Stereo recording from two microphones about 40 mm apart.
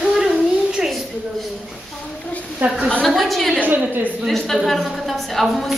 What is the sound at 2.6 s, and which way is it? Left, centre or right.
Speech, right.